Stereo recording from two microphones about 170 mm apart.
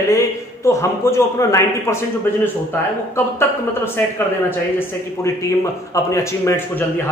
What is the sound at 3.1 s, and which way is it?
Speech, 15° left (ahead or behind).